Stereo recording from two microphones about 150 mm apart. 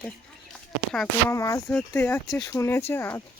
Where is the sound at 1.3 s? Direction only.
20° left (ahead or behind).